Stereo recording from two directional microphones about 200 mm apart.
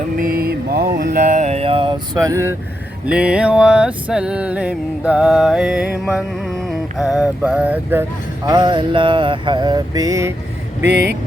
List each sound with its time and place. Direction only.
0.2 s mantra: 45° right (ahead or behind); by 2.6 s 15° right (ahead or behind)
3.1 s music: 5° right (ahead or behind)
8.4 s mantra: 25° right (ahead or behind)
10.9 s speech: 55° right (ahead or behind)